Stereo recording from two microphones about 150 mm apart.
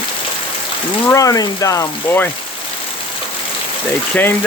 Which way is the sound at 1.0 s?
20° left (ahead or behind).